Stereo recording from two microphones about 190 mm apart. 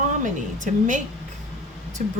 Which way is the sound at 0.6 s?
40° right (ahead or behind).